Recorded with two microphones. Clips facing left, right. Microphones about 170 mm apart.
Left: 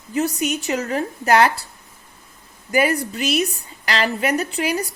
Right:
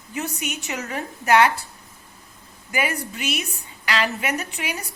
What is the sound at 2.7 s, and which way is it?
A woman's voice, 40° left (ahead or behind).